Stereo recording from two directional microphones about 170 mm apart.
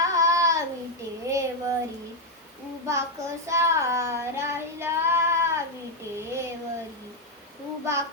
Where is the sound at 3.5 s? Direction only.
15° right (ahead or behind).